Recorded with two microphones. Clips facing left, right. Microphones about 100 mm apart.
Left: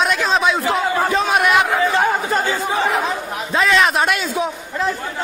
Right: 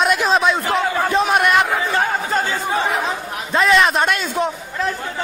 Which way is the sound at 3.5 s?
Centre (ahead or behind).